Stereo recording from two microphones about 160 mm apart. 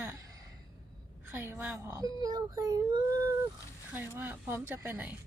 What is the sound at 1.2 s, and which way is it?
Speech, 15° right (ahead or behind).